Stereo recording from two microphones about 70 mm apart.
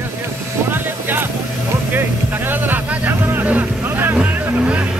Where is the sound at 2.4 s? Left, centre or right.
Right.